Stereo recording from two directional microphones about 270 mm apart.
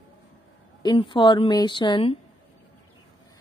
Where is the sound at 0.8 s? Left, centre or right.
Centre.